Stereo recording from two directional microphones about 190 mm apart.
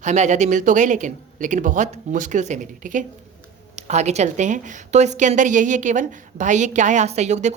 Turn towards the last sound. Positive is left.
turn(degrees=-35)  # may be behind; listen again after turning